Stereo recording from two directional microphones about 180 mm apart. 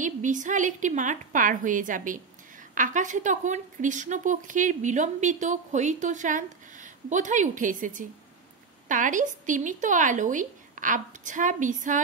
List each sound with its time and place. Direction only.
0.0 s a woman's voice: 45° right (ahead or behind)